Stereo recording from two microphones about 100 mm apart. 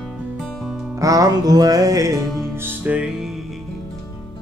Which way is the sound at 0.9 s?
35° right (ahead or behind).